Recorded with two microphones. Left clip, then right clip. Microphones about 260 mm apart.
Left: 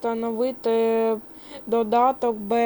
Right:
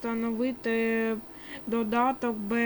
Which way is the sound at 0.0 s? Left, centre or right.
Centre.